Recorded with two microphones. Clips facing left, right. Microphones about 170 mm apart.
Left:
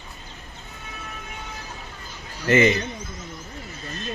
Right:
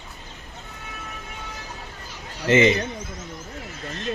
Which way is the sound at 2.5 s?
25° right (ahead or behind).